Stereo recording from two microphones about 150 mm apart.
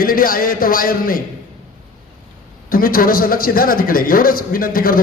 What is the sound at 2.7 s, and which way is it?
A man's voice, 75° left (ahead or behind).